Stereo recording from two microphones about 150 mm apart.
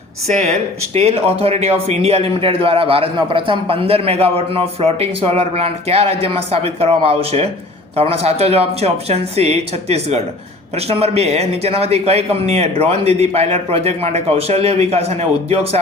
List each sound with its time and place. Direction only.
0.3 s a man's voice: 45° right (ahead or behind)